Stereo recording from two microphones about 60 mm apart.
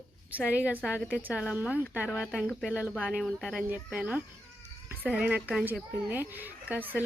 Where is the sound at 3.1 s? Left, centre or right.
Centre.